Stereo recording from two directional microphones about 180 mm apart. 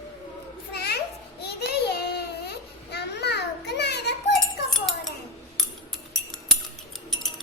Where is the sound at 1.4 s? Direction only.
65° left (ahead or behind).